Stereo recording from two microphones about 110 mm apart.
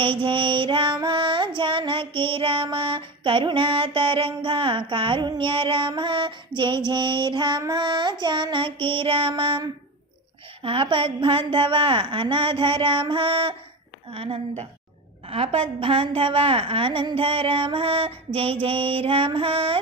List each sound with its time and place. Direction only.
0.0 s child singing: 50° right (ahead or behind)
7.7 s a woman's voice: 45° right (ahead or behind)